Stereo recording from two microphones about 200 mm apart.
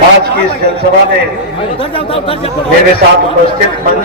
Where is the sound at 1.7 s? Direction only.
25° left (ahead or behind).